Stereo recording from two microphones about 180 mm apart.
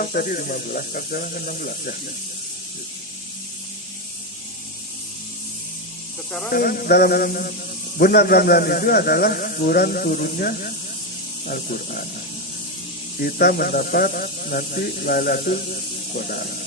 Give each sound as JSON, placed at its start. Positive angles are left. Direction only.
{"t": 0.1, "sound": "speech", "side_deg": 55}
{"t": 6.5, "sound": "speech", "side_deg": 55}
{"t": 13.1, "sound": "speech", "side_deg": 55}